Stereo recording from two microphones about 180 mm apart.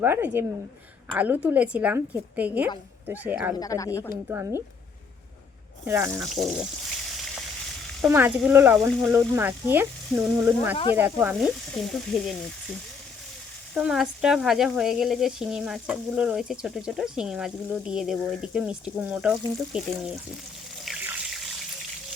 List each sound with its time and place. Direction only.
0.0 s speech: 10° right (ahead or behind)
3.6 s speech: 20° left (ahead or behind)
4.3 s speech: 15° right (ahead or behind)
5.8 s speech: 15° right (ahead or behind)
6.1 s speech: centre (ahead or behind)
8.0 s speech: 10° right (ahead or behind)
11.8 s speech: centre (ahead or behind)
13.7 s speech: centre (ahead or behind)
20.8 s water: 5° right (ahead or behind)